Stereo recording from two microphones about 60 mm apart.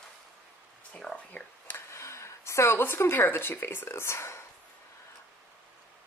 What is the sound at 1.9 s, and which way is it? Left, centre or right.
Speech, left.